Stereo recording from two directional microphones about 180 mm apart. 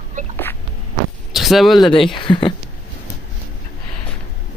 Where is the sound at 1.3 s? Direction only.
Centre (ahead or behind).